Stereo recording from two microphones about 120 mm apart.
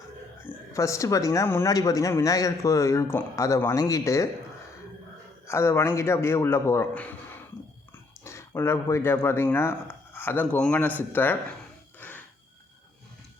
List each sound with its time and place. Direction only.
0.4 s a man's voice: 25° left (ahead or behind)
5.5 s a man's voice: 20° left (ahead or behind)
11.9 s a sound: 15° left (ahead or behind)